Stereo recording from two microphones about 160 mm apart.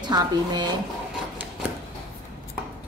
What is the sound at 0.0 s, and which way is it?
Speech, 25° right (ahead or behind).